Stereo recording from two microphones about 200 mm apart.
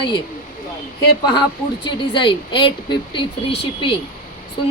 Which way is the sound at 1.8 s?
25° left (ahead or behind).